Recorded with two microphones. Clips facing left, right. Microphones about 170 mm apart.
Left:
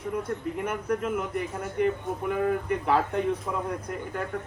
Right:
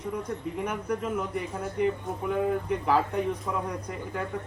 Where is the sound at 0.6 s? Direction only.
5° left (ahead or behind).